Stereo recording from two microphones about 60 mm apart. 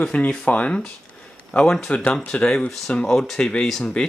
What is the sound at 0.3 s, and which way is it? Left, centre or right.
A man's voice, centre.